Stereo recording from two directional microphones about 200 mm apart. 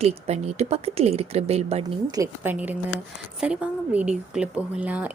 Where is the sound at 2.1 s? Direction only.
15° right (ahead or behind).